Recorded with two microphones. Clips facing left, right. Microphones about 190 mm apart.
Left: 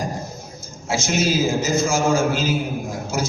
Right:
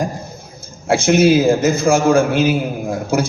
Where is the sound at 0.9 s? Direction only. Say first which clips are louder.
Right 9 dB; 60° right (ahead or behind).